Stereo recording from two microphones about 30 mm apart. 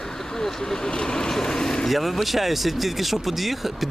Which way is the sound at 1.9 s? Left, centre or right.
Centre.